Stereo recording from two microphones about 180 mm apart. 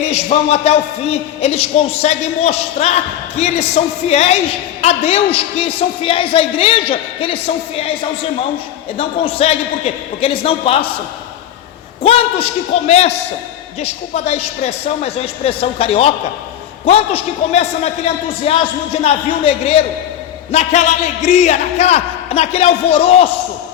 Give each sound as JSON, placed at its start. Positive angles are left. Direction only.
{"t": 0.0, "sound": "a man's voice", "side_deg": 35}
{"t": 9.0, "sound": "a man's voice", "side_deg": 35}
{"t": 12.0, "sound": "a man's voice", "side_deg": 35}